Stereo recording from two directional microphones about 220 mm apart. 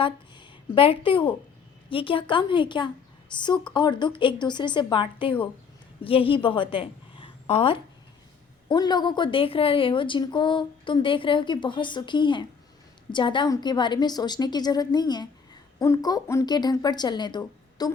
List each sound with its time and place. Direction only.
0.0 s a woman's voice: 25° left (ahead or behind)